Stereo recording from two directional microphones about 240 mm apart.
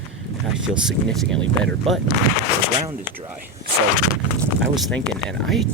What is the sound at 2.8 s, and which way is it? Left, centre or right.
Speech, right.